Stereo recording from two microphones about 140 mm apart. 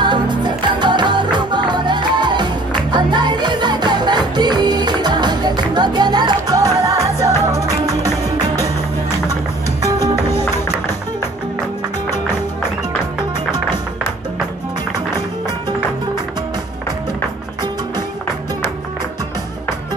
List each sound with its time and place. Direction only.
0.0 s music: 30° right (ahead or behind)